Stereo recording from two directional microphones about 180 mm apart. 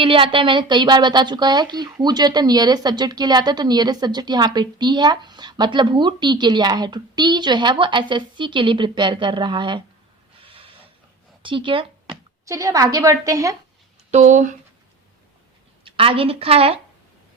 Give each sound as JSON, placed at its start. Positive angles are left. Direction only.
{"t": 0.0, "sound": "a woman's voice", "side_deg": -30}
{"t": 10.4, "sound": "snort", "side_deg": -30}
{"t": 11.4, "sound": "a woman's voice", "side_deg": -30}
{"t": 14.1, "sound": "speech", "side_deg": -45}
{"t": 15.8, "sound": "a woman's voice", "side_deg": -30}